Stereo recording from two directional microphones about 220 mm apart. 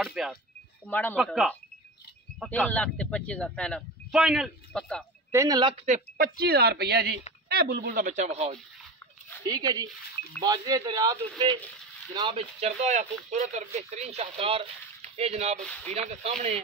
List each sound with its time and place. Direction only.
0.0 s speech: centre (ahead or behind)
5.3 s speech: 15° right (ahead or behind)
5.9 s speech: 35° right (ahead or behind)
9.4 s speech: 15° right (ahead or behind)
15.6 s speech: 5° left (ahead or behind)
16.1 s speech: 30° right (ahead or behind)